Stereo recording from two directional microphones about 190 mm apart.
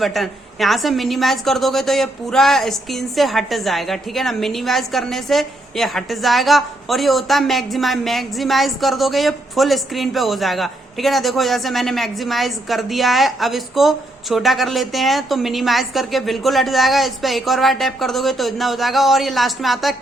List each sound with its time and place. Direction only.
0.0 s a woman's voice: centre (ahead or behind)